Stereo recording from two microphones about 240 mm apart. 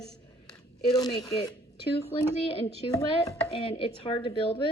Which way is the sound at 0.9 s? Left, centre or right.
Centre.